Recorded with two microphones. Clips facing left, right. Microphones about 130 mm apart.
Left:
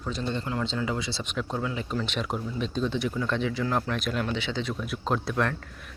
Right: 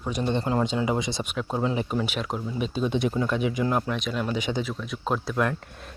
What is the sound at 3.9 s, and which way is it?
Speech, centre (ahead or behind).